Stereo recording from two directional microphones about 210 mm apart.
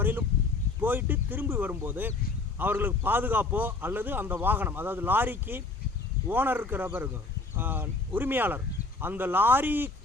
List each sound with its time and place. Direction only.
0.0 s a man's voice: 10° right (ahead or behind)